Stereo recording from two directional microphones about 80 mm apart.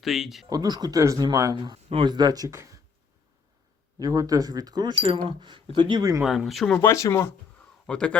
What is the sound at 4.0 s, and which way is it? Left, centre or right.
Speech, right.